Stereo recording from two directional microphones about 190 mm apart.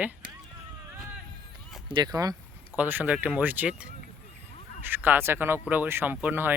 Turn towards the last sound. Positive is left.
turn(degrees=-10)  # may be behind; listen again after turning